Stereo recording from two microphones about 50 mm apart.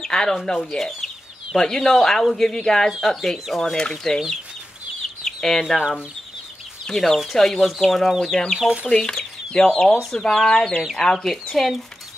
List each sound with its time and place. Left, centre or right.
0.0 s speech: centre
5.2 s chicken: centre
6.9 s speech: centre
8.5 s speech: centre
8.9 s speech: centre